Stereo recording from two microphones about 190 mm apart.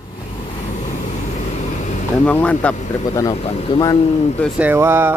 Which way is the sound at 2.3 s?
5° left (ahead or behind).